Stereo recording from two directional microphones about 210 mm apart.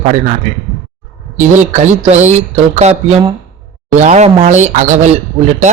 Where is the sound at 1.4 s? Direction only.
35° right (ahead or behind).